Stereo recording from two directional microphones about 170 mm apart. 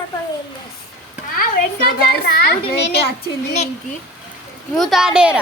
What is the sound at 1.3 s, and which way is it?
A child's voice, 55° left (ahead or behind).